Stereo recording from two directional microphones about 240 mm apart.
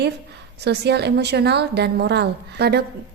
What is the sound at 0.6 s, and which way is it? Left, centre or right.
A woman's voice, right.